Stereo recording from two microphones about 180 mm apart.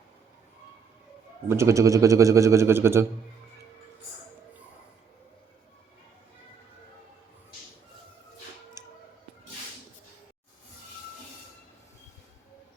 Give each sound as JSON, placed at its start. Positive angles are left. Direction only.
{"t": 1.5, "sound": "a man's voice", "side_deg": -15}